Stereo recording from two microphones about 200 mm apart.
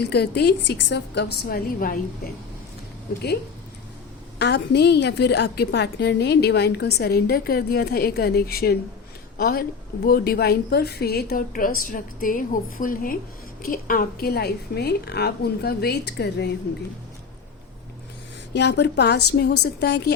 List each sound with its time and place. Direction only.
0.0 s a woman's voice: 55° left (ahead or behind)
4.4 s a woman's voice: 55° left (ahead or behind)
18.5 s a woman's voice: 55° left (ahead or behind)